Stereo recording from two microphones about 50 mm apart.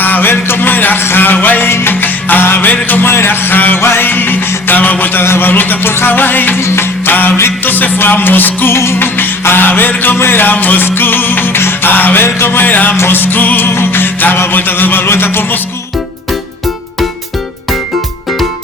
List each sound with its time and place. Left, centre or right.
0.0 s a sound: left
1.0 s music: left
5.2 s a man's voice: left
5.5 s music: left
6.6 s music: left
8.7 s a man's voice: left
9.0 s music: left
13.7 s music: left